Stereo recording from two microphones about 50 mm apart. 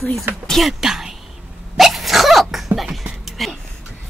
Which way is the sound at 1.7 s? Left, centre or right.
Centre.